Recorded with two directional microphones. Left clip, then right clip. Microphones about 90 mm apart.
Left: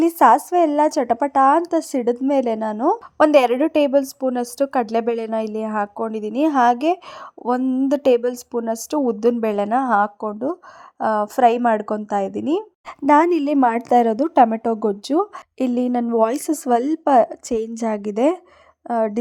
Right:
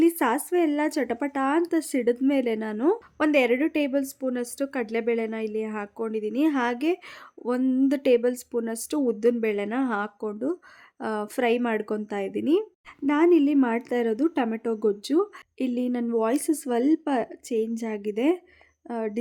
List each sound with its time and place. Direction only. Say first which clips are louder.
0.0 s a woman's voice: left 9 dB; 50° left (ahead or behind)
3.2 s a woman's voice: left 9 dB; 65° left (ahead or behind); by 7.0 s 45° left (ahead or behind)
7.6 s speech: left 3 dB; 15° left (ahead or behind)
7.9 s a woman's voice: left 6 dB; 40° left (ahead or behind); by 10.1 s 55° left (ahead or behind)
10.2 s a woman's voice: left 5 dB; 40° left (ahead or behind)
13.3 s a woman's voice: left 4 dB; 90° left; by 15.3 s 50° left (ahead or behind)
15.5 s a woman's voice: left 8 dB; 75° left (ahead or behind)
16.1 s a woman's voice: left 5 dB; 60° left (ahead or behind)